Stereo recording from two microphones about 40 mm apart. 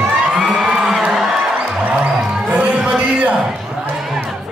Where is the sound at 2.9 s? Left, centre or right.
Right.